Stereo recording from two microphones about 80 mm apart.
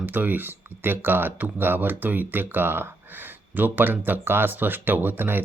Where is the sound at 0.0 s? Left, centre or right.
Right.